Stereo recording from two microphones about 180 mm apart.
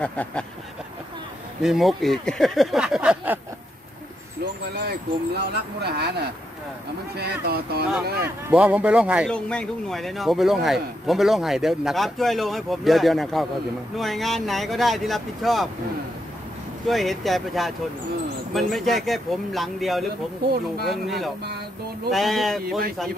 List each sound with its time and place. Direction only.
0.0 s a sound: 5° left (ahead or behind)
1.6 s speech: centre (ahead or behind)
4.8 s speech: 65° right (ahead or behind)
8.5 s speech: 10° right (ahead or behind)
9.3 s speech: 5° left (ahead or behind)
16.8 s speech: centre (ahead or behind)